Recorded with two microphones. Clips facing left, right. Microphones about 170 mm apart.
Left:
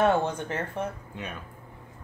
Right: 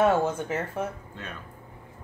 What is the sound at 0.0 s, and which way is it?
Speech, 5° right (ahead or behind).